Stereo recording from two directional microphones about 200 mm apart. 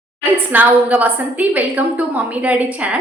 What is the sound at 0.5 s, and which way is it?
A woman's voice, 10° right (ahead or behind).